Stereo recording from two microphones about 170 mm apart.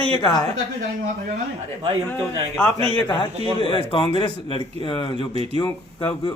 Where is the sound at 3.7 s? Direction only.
30° left (ahead or behind).